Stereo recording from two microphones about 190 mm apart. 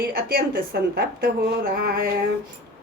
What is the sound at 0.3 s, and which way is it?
A woman's voice, 50° right (ahead or behind).